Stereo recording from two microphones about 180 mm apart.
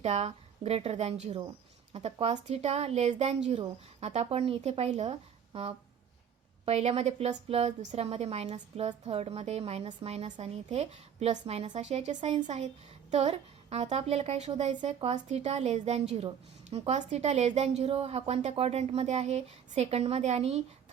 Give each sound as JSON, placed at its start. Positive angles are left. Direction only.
{"t": 0.0, "sound": "speech", "side_deg": -35}
{"t": 6.7, "sound": "a woman's voice", "side_deg": -35}